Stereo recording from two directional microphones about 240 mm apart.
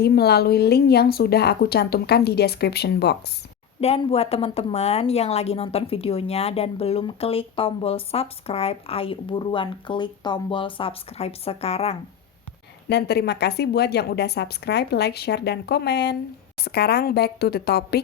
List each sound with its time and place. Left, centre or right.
0.0 s a woman's voice: left
3.8 s a woman's voice: left
12.9 s a woman's voice: left